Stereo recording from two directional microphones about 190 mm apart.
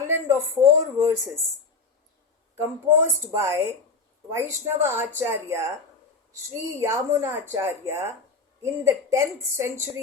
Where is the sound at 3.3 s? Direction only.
15° right (ahead or behind).